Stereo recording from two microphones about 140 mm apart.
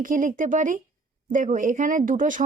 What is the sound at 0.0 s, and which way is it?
A woman's voice, 70° right (ahead or behind).